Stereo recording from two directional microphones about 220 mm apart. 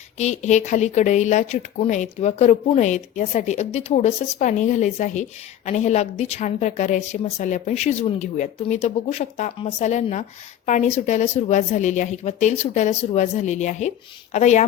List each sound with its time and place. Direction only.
0.2 s speech: 30° left (ahead or behind)